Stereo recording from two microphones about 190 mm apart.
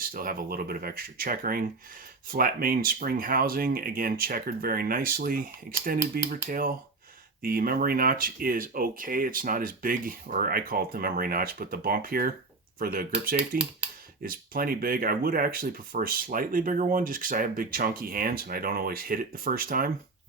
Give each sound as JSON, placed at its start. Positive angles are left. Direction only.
{"t": 0.0, "sound": "speech", "side_deg": -50}